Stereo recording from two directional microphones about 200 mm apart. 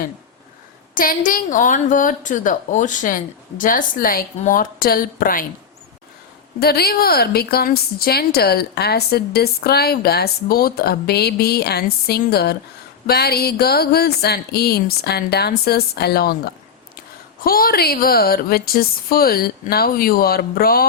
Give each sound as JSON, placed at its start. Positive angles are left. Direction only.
{"t": 0.9, "sound": "a woman's voice", "side_deg": 45}
{"t": 6.6, "sound": "a woman's voice", "side_deg": 50}